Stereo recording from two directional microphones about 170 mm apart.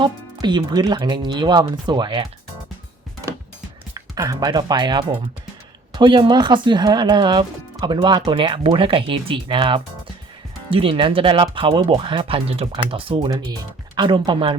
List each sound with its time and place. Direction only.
0.0 s speech: 25° right (ahead or behind)
3.9 s speech: 20° right (ahead or behind)